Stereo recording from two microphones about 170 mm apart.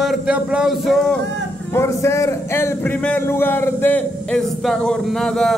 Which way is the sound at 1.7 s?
15° left (ahead or behind).